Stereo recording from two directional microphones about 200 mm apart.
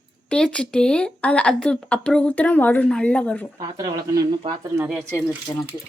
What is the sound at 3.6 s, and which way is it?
Speech, 20° right (ahead or behind).